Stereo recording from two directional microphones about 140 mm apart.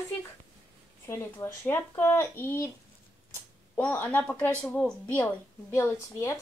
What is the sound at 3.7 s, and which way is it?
Speech, 15° left (ahead or behind).